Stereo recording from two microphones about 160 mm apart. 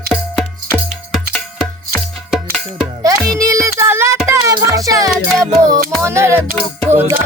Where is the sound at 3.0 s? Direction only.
20° right (ahead or behind).